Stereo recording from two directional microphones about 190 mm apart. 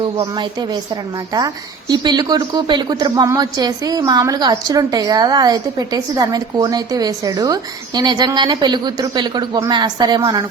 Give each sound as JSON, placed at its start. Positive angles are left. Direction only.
{"t": 0.0, "sound": "a woman's voice", "side_deg": -25}
{"t": 1.9, "sound": "a woman's voice", "side_deg": -20}